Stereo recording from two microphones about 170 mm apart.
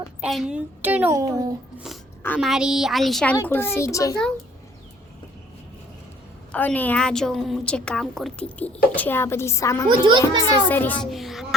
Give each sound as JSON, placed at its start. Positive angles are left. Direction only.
{"t": 0.2, "sound": "a woman's voice", "side_deg": -5}
{"t": 1.1, "sound": "a child's voice", "side_deg": -20}
{"t": 2.4, "sound": "speech", "side_deg": -5}
{"t": 3.3, "sound": "a woman's voice", "side_deg": 15}
{"t": 6.5, "sound": "a woman's voice", "side_deg": 10}
{"t": 9.9, "sound": "a child's voice", "side_deg": -25}
{"t": 10.7, "sound": "a woman's voice", "side_deg": 10}